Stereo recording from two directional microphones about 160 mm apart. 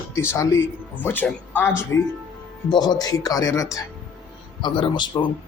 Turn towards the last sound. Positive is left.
turn(degrees=30)  # may be behind; listen again after turning